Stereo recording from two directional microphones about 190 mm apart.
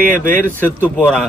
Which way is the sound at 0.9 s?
5° left (ahead or behind).